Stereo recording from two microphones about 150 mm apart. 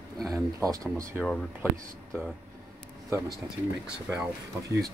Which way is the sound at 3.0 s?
20° right (ahead or behind).